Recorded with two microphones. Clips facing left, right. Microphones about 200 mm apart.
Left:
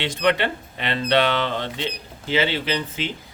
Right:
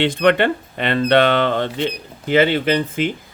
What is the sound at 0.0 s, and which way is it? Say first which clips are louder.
Speech: right 6 dB; 55° right (ahead or behind).